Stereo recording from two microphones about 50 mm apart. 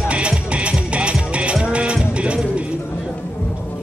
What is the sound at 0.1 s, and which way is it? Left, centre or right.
Music, right.